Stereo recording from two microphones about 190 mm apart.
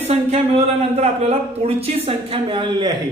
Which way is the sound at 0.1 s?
35° right (ahead or behind).